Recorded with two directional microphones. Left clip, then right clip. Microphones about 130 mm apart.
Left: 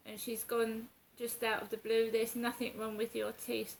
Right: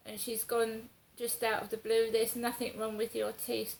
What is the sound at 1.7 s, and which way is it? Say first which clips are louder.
A woman's voice: right 2 dB; 30° left (ahead or behind).